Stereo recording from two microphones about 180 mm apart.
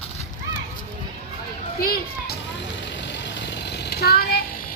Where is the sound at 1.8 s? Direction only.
55° left (ahead or behind).